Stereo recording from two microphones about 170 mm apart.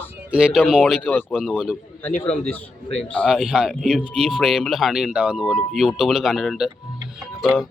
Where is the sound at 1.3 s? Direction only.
5° right (ahead or behind).